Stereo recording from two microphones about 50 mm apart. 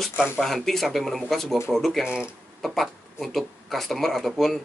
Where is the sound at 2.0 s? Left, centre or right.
Centre.